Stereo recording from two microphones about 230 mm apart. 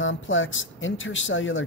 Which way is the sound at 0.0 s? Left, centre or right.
Left.